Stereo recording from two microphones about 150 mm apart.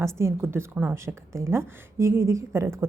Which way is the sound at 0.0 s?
20° right (ahead or behind).